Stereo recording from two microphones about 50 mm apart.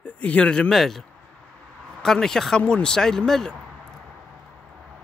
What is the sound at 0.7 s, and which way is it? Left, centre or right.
Speech, centre.